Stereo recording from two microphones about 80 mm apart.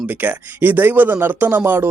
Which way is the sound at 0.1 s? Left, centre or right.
Right.